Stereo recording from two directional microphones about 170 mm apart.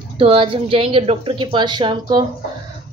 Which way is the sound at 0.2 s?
35° right (ahead or behind).